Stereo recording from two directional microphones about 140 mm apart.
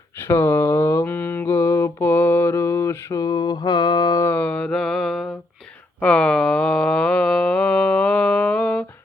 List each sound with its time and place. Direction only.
0.3 s mantra: 20° left (ahead or behind)
4.3 s mantra: 10° left (ahead or behind)
6.0 s a sound: 10° left (ahead or behind)